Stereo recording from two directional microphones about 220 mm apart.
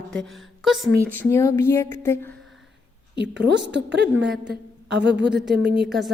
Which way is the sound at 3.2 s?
50° right (ahead or behind).